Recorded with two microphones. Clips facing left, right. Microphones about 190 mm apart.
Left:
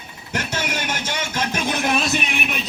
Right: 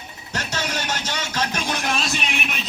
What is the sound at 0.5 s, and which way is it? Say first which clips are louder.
Music: right 1 dB; 10° left (ahead or behind).